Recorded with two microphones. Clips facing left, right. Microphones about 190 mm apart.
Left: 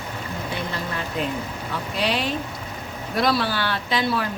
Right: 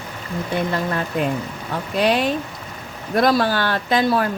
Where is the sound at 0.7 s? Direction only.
50° right (ahead or behind).